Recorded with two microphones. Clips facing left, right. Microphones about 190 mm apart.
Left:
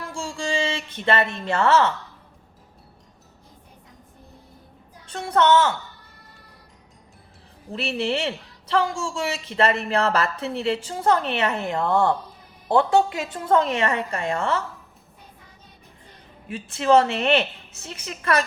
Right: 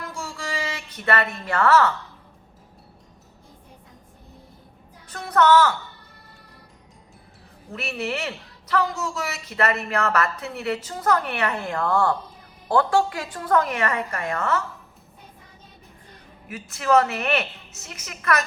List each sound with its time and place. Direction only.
0.0 s a sound: 30° left (ahead or behind)
5.0 s a man's voice: 25° left (ahead or behind)
7.7 s a man's voice: 30° left (ahead or behind)
16.5 s a man's voice: 30° left (ahead or behind)